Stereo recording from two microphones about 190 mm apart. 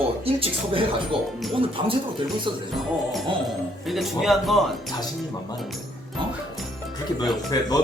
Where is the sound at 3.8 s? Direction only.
Centre (ahead or behind).